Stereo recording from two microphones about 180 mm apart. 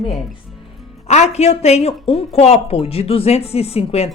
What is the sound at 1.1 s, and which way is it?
Speech, 40° left (ahead or behind).